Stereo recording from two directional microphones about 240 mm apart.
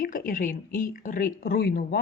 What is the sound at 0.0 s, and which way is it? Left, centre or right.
Speech, left.